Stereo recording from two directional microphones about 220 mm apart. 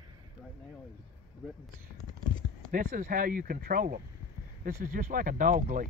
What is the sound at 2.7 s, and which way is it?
Speech, 40° right (ahead or behind).